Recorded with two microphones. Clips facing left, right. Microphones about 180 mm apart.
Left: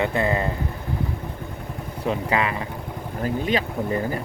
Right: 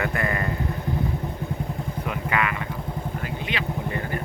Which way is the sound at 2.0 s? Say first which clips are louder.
Left 4 dB; 30° left (ahead or behind).